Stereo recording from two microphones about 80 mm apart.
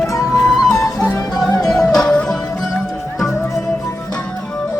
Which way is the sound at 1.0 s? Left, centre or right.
Left.